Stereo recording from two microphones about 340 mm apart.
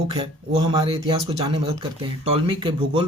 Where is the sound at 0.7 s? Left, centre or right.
Centre.